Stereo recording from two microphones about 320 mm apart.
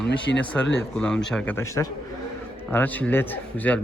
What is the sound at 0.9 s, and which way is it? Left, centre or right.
A man's voice, centre.